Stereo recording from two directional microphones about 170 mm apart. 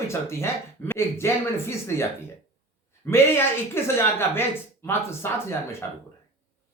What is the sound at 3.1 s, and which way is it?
Speech, 15° left (ahead or behind).